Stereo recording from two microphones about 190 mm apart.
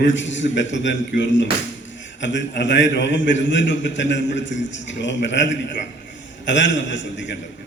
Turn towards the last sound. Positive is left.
turn(degrees=70)  # may be behind; listen again after turning